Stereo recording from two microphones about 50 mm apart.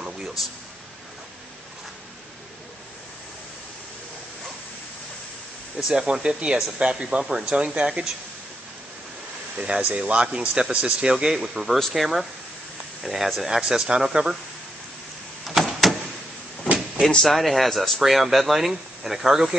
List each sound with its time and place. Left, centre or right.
0.0 s a sound: centre
5.9 s speech: centre
9.6 s speech: centre
11.1 s speech: centre
15.4 s a sound: centre
17.3 s speech: centre